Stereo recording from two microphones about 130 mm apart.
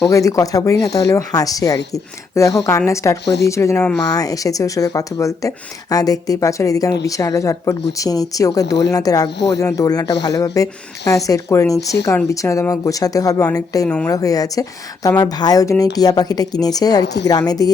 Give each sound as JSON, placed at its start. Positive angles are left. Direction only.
{"t": 0.0, "sound": "speech", "side_deg": 25}
{"t": 13.8, "sound": "a woman's voice", "side_deg": 10}
{"t": 14.1, "sound": "speech", "side_deg": 25}